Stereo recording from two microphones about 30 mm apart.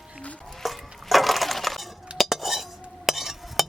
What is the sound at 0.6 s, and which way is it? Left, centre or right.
Chink, centre.